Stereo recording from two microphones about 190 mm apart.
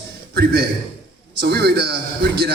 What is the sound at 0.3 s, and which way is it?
A man's voice, 55° right (ahead or behind).